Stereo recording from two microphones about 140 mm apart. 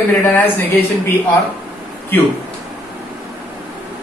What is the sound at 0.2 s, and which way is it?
Speech, 15° left (ahead or behind).